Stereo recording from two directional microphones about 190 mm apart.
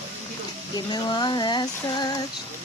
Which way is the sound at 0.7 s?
20° left (ahead or behind).